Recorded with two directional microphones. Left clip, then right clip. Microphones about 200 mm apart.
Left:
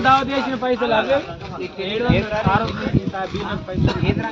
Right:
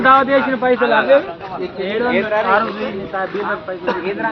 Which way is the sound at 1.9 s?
30° left (ahead or behind).